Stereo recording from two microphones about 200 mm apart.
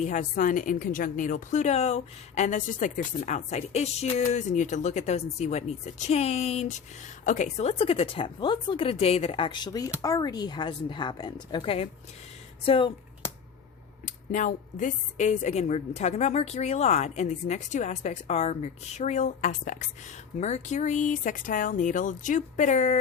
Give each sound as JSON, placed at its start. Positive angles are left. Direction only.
{"t": 0.0, "sound": "a woman's voice", "side_deg": 40}
{"t": 14.0, "sound": "a woman's voice", "side_deg": 40}